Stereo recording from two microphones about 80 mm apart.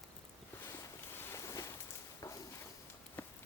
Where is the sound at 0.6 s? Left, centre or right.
Left.